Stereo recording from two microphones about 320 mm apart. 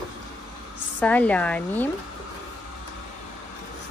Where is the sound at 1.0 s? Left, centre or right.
Centre.